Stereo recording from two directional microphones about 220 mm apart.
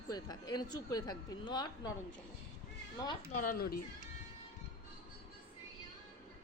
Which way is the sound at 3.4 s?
45° left (ahead or behind).